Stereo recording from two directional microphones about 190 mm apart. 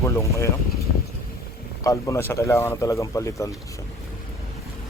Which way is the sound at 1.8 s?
15° left (ahead or behind).